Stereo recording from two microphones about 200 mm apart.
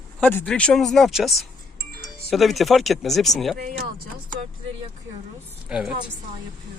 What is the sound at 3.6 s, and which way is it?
Speech, 50° right (ahead or behind).